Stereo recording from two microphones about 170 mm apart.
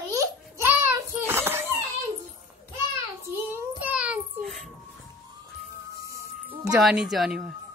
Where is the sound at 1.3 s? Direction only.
15° right (ahead or behind).